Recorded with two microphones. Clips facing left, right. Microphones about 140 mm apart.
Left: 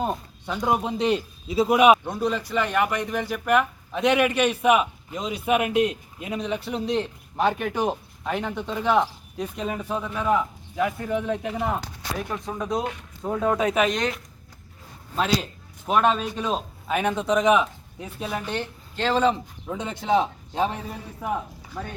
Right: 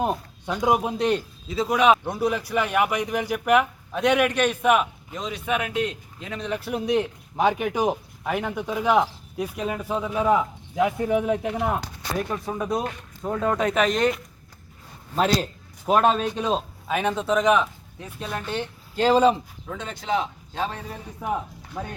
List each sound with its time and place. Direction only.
0.0 s a sound: 15° right (ahead or behind)
0.6 s a man's voice: 10° right (ahead or behind)
1.7 s speech: 15° left (ahead or behind)
2.0 s speech: 10° right (ahead or behind)
3.9 s a man's voice: centre (ahead or behind)
6.4 s speech: centre (ahead or behind)
11.4 s a man's voice: centre (ahead or behind)
12.8 s speech: 5° left (ahead or behind)
15.1 s a man's voice: centre (ahead or behind)
18.9 s speech: 10° right (ahead or behind)
19.6 s speech: 15° left (ahead or behind)
19.9 s speech: 25° left (ahead or behind)